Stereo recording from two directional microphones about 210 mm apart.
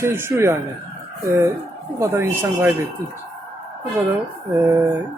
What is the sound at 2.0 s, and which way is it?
Speech, 15° right (ahead or behind).